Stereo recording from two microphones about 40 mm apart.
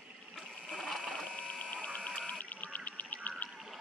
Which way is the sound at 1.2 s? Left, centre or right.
Left.